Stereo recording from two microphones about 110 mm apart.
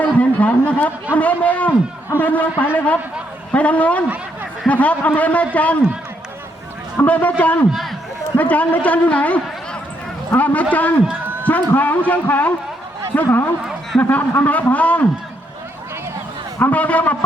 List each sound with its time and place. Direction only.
0.2 s a man's voice: 15° left (ahead or behind)
6.9 s a man's voice: 15° left (ahead or behind)
7.7 s a man's voice: centre (ahead or behind)
8.4 s a man's voice: 15° left (ahead or behind)
16.6 s a man's voice: 15° left (ahead or behind)